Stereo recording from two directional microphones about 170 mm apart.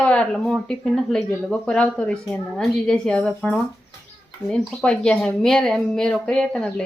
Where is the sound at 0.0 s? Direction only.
5° left (ahead or behind).